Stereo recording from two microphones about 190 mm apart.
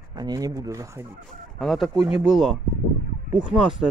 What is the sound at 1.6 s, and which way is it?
Speech, centre (ahead or behind).